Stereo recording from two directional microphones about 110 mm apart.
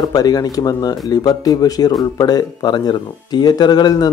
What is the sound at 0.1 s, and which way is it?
Speech, 35° left (ahead or behind).